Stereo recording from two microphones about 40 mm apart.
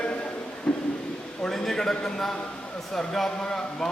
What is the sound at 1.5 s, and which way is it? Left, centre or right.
A man's voice, centre.